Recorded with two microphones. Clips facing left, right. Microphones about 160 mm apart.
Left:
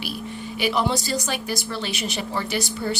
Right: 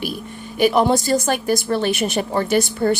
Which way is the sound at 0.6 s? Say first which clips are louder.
Right 8 dB; 50° right (ahead or behind).